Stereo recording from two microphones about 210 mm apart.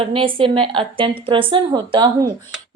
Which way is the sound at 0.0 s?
25° right (ahead or behind).